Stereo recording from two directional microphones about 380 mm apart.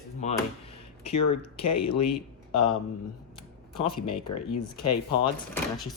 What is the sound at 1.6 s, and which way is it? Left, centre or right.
Speech, left.